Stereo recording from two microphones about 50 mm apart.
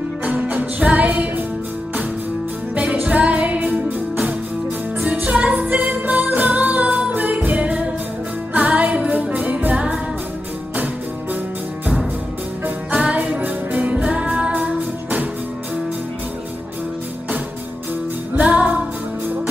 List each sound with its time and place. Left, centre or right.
0.2 s music: right
2.7 s music: right
5.2 s music: right
12.9 s music: right
18.4 s music: right